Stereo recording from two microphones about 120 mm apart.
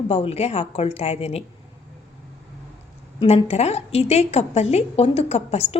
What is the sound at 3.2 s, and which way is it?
A woman's voice, 55° left (ahead or behind).